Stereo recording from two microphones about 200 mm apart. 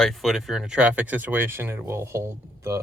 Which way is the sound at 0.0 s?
Centre (ahead or behind).